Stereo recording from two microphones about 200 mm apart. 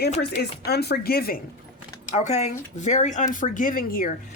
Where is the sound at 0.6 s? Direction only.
55° left (ahead or behind).